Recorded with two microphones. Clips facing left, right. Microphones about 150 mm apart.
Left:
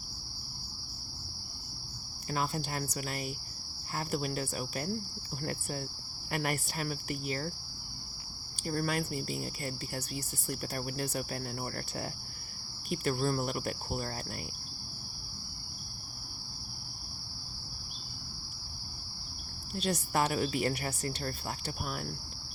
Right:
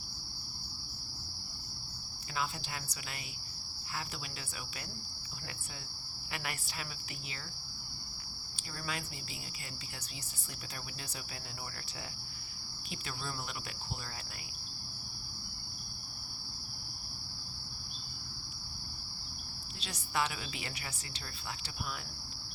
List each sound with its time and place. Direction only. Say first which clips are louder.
2.3 s a woman's voice: left 5 dB; 45° left (ahead or behind)
6.3 s a woman's voice: left 9 dB; 45° left (ahead or behind)
8.6 s a woman's voice: left 10 dB; 50° left (ahead or behind)
12.9 s a woman's voice: left 12 dB; 50° left (ahead or behind)
19.7 s a woman's voice: left 7 dB; 50° left (ahead or behind)